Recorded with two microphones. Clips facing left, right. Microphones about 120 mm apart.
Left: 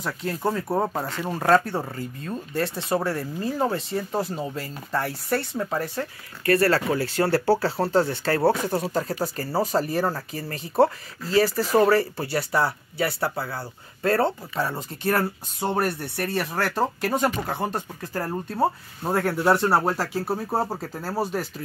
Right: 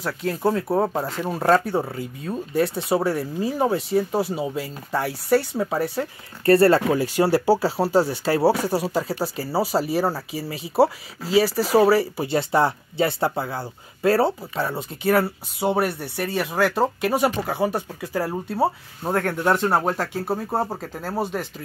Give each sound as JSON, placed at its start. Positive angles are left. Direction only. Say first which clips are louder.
{"t": 0.0, "sound": "speech", "louder": "right 4 dB", "side_deg": 0}
{"t": 6.4, "sound": "speech", "louder": "right 5 dB", "side_deg": -30}
{"t": 6.9, "sound": "speech", "louder": "right 3 dB", "side_deg": -15}
{"t": 12.3, "sound": "speech", "louder": "right 4 dB", "side_deg": -20}
{"t": 20.9, "sound": "speech", "louder": "right 1 dB", "side_deg": -15}
{"t": 21.2, "sound": "speech", "louder": "even", "side_deg": 5}